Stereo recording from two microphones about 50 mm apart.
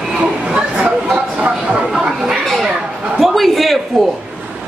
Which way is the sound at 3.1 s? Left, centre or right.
Centre.